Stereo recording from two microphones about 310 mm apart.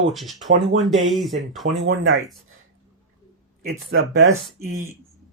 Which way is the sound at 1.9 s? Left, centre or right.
Right.